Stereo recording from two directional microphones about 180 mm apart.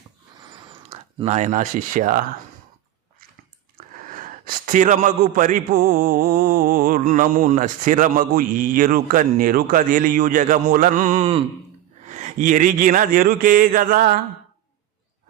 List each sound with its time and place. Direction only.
0.9 s speech: 35° right (ahead or behind)
3.8 s a man's voice: 50° right (ahead or behind)